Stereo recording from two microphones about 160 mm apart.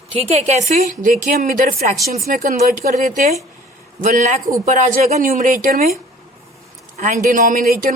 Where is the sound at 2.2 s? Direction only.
65° right (ahead or behind).